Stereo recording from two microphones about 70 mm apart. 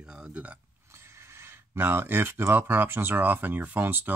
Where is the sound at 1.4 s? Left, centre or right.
Right.